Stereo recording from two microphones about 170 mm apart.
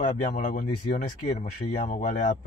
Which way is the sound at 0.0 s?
50° left (ahead or behind).